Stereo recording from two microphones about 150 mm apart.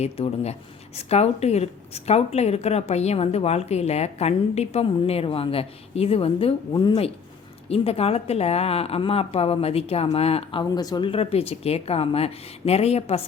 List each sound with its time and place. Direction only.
0.0 s a woman's voice: 45° left (ahead or behind)